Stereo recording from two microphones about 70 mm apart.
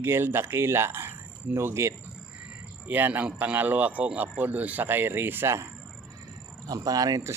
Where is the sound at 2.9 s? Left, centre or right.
Right.